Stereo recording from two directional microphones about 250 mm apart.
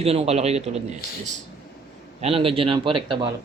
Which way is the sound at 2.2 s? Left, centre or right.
Right.